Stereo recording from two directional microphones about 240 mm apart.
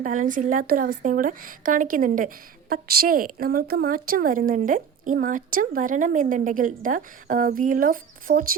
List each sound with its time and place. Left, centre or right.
0.0 s a woman's voice: right